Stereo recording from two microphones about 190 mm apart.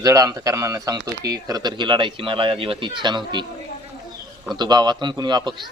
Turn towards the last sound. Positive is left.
turn(degrees=-25)  # may be behind; listen again after turning